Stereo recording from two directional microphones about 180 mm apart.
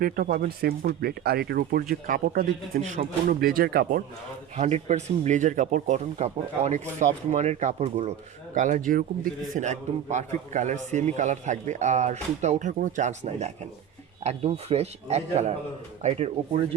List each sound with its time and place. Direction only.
0.0 s speech: 55° right (ahead or behind)
4.5 s a man's voice: 40° right (ahead or behind)
9.6 s a man's voice: 40° right (ahead or behind)